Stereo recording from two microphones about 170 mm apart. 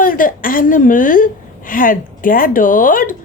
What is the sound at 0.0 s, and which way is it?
A woman's voice, 55° left (ahead or behind).